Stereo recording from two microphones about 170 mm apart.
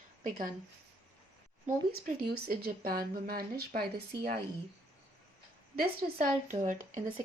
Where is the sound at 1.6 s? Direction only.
60° right (ahead or behind).